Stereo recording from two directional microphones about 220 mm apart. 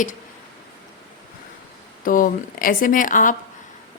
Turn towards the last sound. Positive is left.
turn(degrees=35)  # may be behind; listen again after turning